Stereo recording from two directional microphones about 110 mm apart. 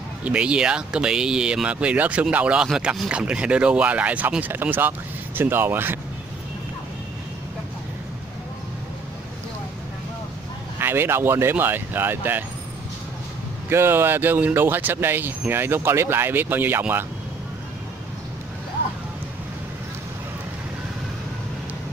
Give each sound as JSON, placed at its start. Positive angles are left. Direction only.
{"t": 0.2, "sound": "speech", "side_deg": -10}
{"t": 10.8, "sound": "speech", "side_deg": -20}
{"t": 13.7, "sound": "speech", "side_deg": -20}